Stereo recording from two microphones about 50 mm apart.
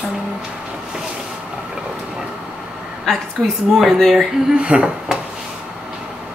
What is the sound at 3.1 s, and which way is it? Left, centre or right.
A woman's voice, centre.